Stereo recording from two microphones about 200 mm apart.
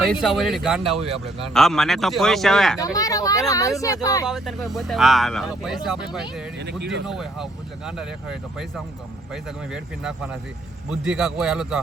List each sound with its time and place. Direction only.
0.2 s speech: centre (ahead or behind)
2.7 s speech: 15° left (ahead or behind)
4.3 s speech: centre (ahead or behind)
6.7 s speech: 55° right (ahead or behind)
7.1 s speech: centre (ahead or behind)